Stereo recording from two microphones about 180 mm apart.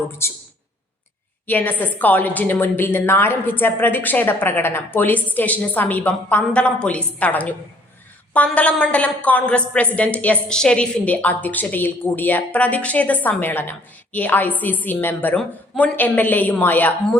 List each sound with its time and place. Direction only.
0.2 s a woman's voice: 15° left (ahead or behind)
1.5 s a woman's voice: 10° left (ahead or behind)